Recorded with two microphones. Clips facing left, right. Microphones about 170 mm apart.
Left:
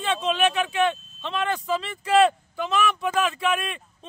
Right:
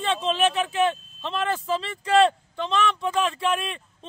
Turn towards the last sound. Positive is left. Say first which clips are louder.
# even
turn(degrees=0)  # may be behind; listen again after turning